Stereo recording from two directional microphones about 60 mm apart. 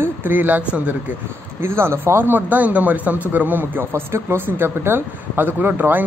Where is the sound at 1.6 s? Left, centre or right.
Right.